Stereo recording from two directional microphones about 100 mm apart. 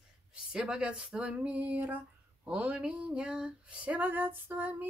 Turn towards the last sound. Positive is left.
turn(degrees=-15)  # may be behind; listen again after turning